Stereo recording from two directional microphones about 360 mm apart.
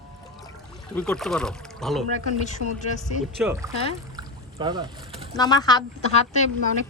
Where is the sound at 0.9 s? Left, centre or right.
Centre.